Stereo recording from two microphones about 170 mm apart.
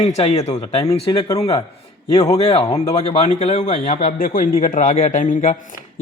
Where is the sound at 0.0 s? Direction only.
40° left (ahead or behind).